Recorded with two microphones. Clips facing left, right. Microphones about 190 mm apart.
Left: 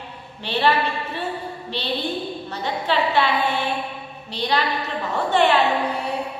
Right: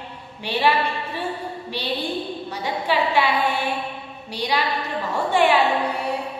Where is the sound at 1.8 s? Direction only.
10° right (ahead or behind).